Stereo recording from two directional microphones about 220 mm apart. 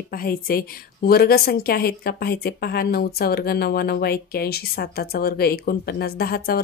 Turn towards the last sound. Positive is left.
turn(degrees=45)  # may be behind; listen again after turning